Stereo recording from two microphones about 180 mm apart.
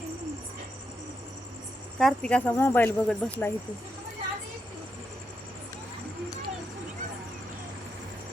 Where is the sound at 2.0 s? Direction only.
5° left (ahead or behind).